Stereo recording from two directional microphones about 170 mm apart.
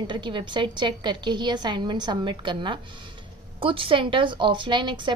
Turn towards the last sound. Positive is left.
turn(degrees=-25)  # may be behind; listen again after turning